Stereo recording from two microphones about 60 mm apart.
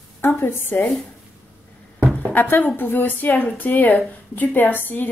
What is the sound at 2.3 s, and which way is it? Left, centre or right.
A woman's voice, left.